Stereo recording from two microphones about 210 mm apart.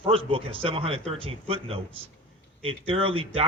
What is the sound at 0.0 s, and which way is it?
Speech, 25° right (ahead or behind).